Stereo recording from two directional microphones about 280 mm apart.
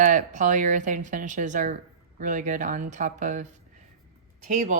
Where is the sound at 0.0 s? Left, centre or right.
Right.